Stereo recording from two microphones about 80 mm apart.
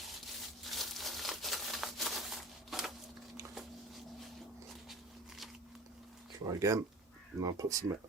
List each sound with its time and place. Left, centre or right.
0.6 s crumpling: centre
6.4 s speech: right